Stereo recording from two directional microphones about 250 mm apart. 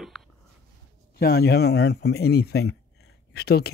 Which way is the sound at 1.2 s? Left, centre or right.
Left.